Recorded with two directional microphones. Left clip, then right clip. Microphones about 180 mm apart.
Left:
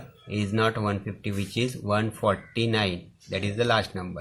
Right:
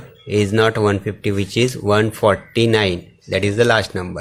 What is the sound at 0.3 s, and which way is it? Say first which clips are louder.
Speech: right 10 dB; 35° right (ahead or behind).